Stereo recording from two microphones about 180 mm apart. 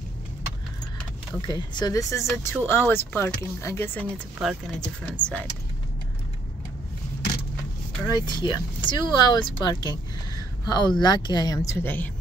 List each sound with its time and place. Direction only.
1.5 s speech: 25° left (ahead or behind)
4.4 s speech: centre (ahead or behind)
8.1 s speech: 25° left (ahead or behind)